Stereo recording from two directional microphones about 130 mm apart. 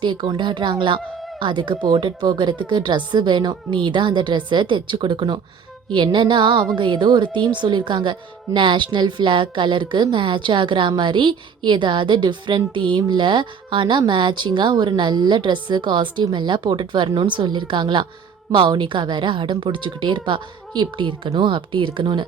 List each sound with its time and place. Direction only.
0.0 s a woman's voice: 40° right (ahead or behind)